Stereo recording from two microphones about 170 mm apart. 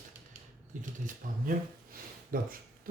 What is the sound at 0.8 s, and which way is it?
Speech, 55° right (ahead or behind).